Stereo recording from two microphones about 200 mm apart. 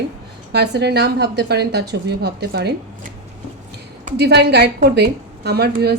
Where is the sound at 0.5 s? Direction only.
55° right (ahead or behind).